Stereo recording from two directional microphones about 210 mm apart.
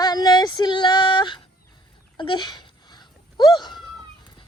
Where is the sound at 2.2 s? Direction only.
20° left (ahead or behind).